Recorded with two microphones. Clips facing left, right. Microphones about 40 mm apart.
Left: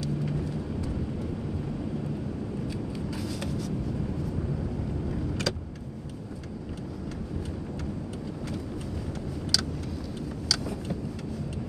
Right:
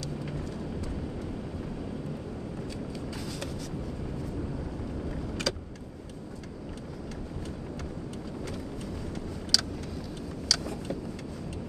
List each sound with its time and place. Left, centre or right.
0.2 s horse: centre
3.2 s vehicle: centre
5.5 s vehicle: centre
9.5 s vehicle: centre